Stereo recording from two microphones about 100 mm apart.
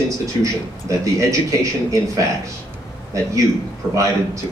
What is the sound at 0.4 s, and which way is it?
Speech, 30° right (ahead or behind).